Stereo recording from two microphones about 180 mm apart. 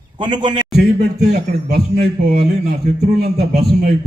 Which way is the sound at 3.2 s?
60° right (ahead or behind).